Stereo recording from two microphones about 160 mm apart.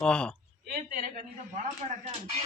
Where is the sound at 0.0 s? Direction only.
5° left (ahead or behind).